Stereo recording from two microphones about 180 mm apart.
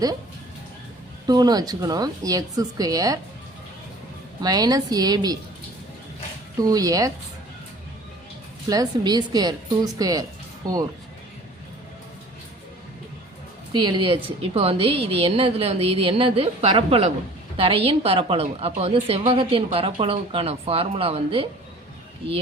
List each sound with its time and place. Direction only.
1.3 s a woman's voice: 20° right (ahead or behind)
4.4 s a woman's voice: 20° right (ahead or behind)
6.6 s a woman's voice: 20° right (ahead or behind)
8.7 s a woman's voice: 20° right (ahead or behind)
13.7 s a woman's voice: 25° right (ahead or behind)